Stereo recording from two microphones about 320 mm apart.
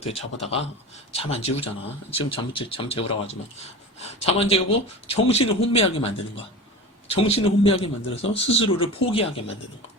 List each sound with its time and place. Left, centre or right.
0.0 s speech: centre
7.1 s speech: centre